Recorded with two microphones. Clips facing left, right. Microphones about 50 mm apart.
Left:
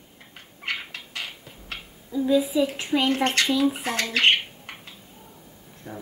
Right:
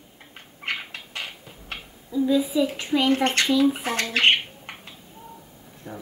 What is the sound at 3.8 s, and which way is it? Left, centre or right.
Squawk, right.